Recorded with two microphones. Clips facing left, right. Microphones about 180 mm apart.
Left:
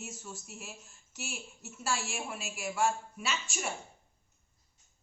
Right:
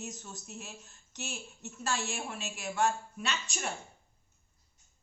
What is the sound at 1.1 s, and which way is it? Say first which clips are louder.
Speech: right 1 dB; 35° right (ahead or behind).